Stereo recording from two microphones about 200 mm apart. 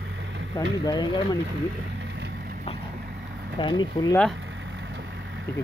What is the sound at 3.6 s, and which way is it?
Speech, 25° left (ahead or behind).